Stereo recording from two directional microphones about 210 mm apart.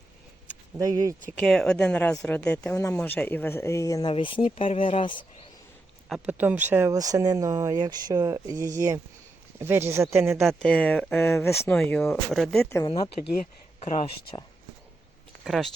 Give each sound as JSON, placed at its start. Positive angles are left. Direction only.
{"t": 0.8, "sound": "speech", "side_deg": -15}
{"t": 1.5, "sound": "speech", "side_deg": 5}
{"t": 6.1, "sound": "speech", "side_deg": -5}
{"t": 10.6, "sound": "speech", "side_deg": 5}
{"t": 13.2, "sound": "speech", "side_deg": 35}
{"t": 15.4, "sound": "speech", "side_deg": 0}